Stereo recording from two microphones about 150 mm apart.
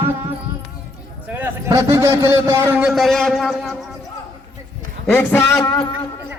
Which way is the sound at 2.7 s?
5° right (ahead or behind).